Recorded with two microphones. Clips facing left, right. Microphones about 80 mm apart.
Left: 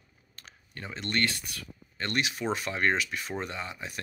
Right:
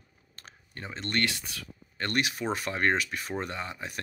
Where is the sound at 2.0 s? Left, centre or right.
Right.